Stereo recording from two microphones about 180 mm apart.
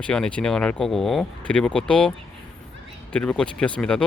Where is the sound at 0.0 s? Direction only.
5° left (ahead or behind).